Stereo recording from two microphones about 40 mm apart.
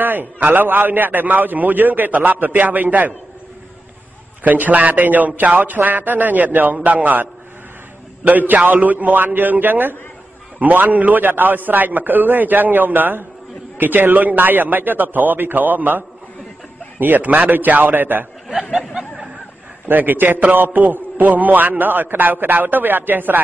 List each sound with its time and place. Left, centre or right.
0.0 s a man's voice: right
4.4 s a man's voice: right
17.0 s a man's voice: right
19.9 s a man's voice: right